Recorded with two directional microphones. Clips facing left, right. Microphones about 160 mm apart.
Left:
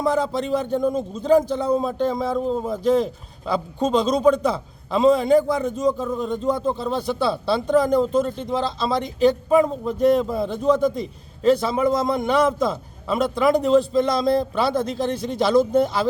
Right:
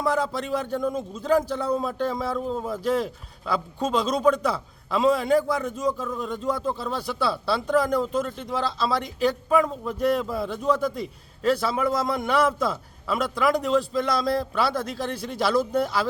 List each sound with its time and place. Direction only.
0.0 s a man's voice: 25° left (ahead or behind)